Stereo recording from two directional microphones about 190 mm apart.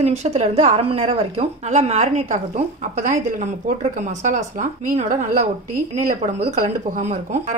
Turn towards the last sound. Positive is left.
turn(degrees=-40)  # may be behind; listen again after turning